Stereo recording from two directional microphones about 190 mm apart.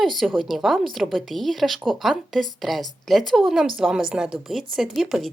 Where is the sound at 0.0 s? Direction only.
Centre (ahead or behind).